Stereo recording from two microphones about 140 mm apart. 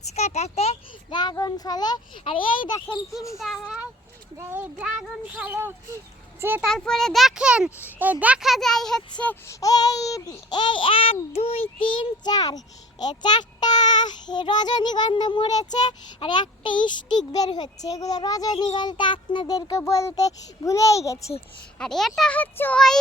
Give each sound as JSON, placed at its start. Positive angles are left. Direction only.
{"t": 0.2, "sound": "a child's voice", "side_deg": 50}
{"t": 1.1, "sound": "a child's voice", "side_deg": 30}
{"t": 3.3, "sound": "a child's voice", "side_deg": 0}
{"t": 4.4, "sound": "speech", "side_deg": -15}
{"t": 6.7, "sound": "speech", "side_deg": 5}
{"t": 9.5, "sound": "a child's voice", "side_deg": 25}
{"t": 21.8, "sound": "speech", "side_deg": 5}